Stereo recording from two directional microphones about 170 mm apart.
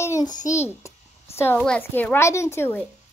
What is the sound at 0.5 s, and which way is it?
Speech, 15° left (ahead or behind).